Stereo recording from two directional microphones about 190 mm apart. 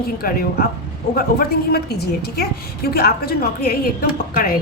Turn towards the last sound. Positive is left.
turn(degrees=50)  # may be behind; listen again after turning